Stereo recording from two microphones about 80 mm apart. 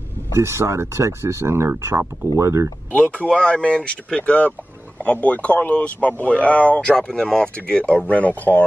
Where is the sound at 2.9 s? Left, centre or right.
Centre.